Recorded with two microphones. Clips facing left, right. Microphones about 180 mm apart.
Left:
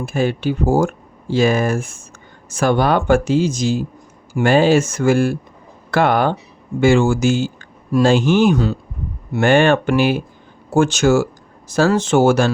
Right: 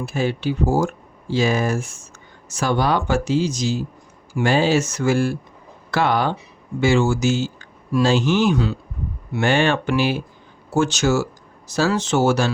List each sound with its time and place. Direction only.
0.0 s speech: 50° left (ahead or behind)